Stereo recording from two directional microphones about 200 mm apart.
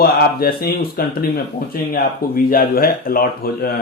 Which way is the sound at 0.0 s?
50° left (ahead or behind).